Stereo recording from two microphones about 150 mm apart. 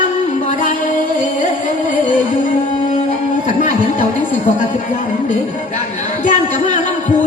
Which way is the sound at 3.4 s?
55° left (ahead or behind).